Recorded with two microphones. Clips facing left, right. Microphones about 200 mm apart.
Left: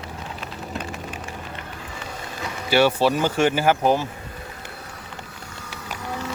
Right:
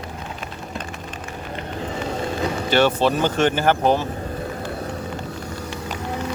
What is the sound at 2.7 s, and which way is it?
Speech, 10° left (ahead or behind).